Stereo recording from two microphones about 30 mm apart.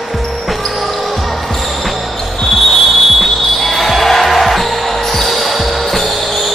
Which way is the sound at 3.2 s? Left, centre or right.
Centre.